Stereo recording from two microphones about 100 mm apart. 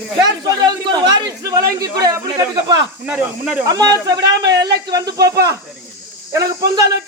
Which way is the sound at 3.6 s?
40° right (ahead or behind).